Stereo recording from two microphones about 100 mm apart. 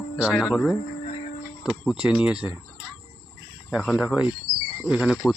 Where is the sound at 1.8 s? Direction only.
10° right (ahead or behind).